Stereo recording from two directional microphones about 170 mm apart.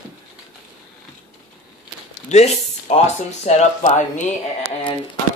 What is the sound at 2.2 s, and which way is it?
Speech, 40° left (ahead or behind).